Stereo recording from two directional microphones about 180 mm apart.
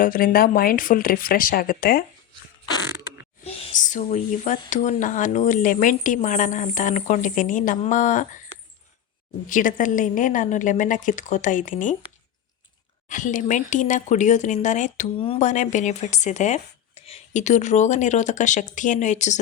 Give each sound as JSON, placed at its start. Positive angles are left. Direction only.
{"t": 0.0, "sound": "speech", "side_deg": 55}
{"t": 3.4, "sound": "speech", "side_deg": 40}
{"t": 9.5, "sound": "speech", "side_deg": 50}
{"t": 13.1, "sound": "speech", "side_deg": 45}